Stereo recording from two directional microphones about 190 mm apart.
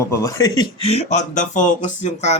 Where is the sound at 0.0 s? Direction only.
15° left (ahead or behind).